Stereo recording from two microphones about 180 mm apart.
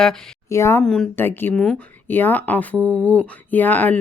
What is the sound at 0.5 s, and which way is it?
Speech, 15° left (ahead or behind).